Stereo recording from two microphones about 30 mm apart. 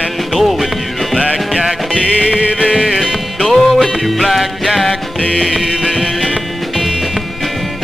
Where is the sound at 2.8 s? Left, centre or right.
Centre.